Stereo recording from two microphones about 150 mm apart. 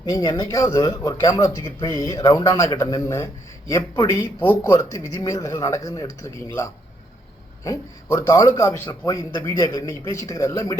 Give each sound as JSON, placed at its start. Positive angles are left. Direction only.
{"t": 0.0, "sound": "speech", "side_deg": 25}